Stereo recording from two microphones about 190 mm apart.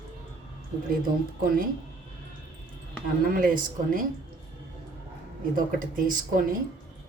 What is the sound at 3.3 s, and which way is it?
Speech, 45° right (ahead or behind).